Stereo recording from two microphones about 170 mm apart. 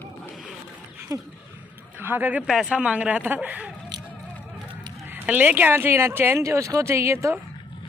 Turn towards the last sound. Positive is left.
turn(degrees=-15)  # may be behind; listen again after turning